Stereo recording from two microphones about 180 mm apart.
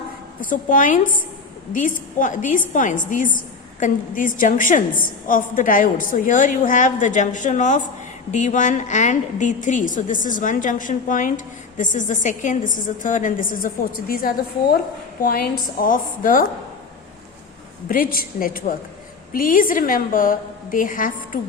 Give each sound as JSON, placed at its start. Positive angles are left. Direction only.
{"t": 0.5, "sound": "a woman's voice", "side_deg": 50}
{"t": 17.8, "sound": "a woman's voice", "side_deg": 50}